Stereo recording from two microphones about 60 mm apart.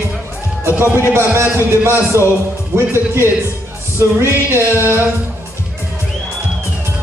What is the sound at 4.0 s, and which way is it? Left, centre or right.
Music, right.